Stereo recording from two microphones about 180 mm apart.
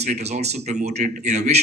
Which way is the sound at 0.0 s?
35° right (ahead or behind).